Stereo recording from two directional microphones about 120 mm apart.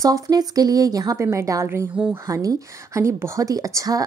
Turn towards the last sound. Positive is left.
turn(degrees=-30)  # may be behind; listen again after turning